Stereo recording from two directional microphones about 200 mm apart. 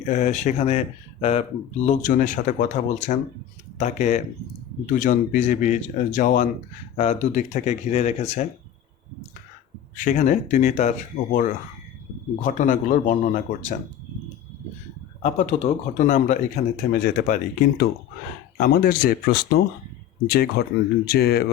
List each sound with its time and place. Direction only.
0.0 s speech: 35° left (ahead or behind)
2.0 s speech: 40° left (ahead or behind)
9.9 s speech: 40° left (ahead or behind)
15.2 s speech: 35° left (ahead or behind)
16.8 s speech: 80° left
17.2 s speech: 45° left (ahead or behind)